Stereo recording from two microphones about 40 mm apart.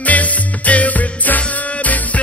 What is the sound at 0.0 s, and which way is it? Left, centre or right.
Music, left.